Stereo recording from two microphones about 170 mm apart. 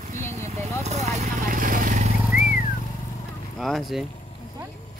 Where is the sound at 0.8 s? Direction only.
40° right (ahead or behind).